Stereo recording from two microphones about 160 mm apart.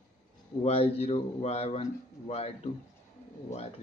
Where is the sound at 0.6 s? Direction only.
35° left (ahead or behind).